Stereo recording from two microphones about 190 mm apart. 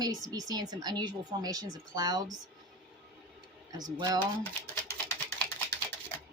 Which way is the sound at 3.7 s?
20° right (ahead or behind).